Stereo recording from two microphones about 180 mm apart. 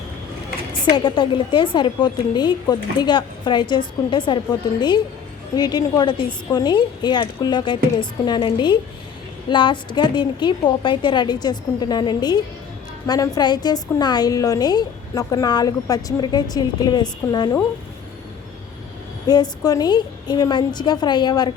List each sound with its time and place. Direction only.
0.9 s a woman's voice: 25° left (ahead or behind)
19.3 s a woman's voice: 20° left (ahead or behind)